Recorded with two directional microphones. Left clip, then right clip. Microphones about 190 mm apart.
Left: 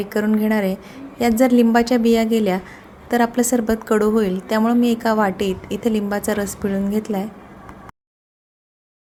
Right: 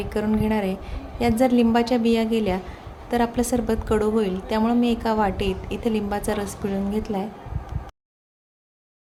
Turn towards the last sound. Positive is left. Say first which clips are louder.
# left 4 dB
turn(degrees=25)  # may be behind; listen again after turning